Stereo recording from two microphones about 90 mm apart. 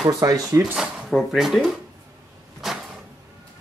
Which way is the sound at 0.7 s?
5° right (ahead or behind).